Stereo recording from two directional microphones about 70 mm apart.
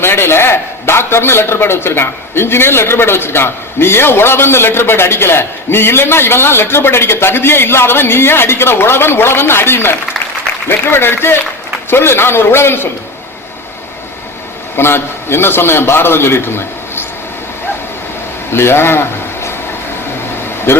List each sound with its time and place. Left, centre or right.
0.0 s a man's voice: left
14.8 s a man's voice: left
18.5 s speech: left
20.7 s speech: left